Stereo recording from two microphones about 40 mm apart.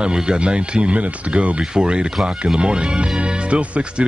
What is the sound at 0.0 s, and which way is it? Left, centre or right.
Speech, right.